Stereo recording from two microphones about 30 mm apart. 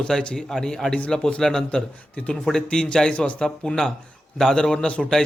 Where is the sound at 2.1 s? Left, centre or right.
Left.